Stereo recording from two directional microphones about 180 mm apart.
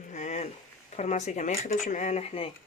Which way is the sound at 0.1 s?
40° left (ahead or behind).